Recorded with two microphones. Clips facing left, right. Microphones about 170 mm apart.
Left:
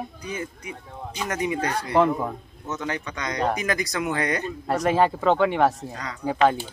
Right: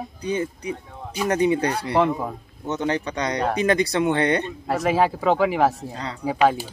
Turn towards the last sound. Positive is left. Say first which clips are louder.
# right 1 dB
turn(degrees=-10)  # may be behind; listen again after turning